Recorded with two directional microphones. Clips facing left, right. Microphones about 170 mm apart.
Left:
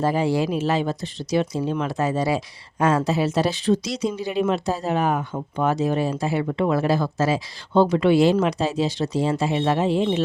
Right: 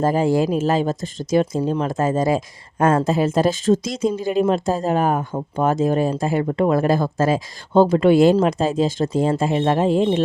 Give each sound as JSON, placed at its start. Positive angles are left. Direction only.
{"t": 0.0, "sound": "speech", "side_deg": -45}
{"t": 1.9, "sound": "speech", "side_deg": -45}